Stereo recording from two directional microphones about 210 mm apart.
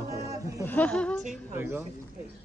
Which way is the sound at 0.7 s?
5° left (ahead or behind).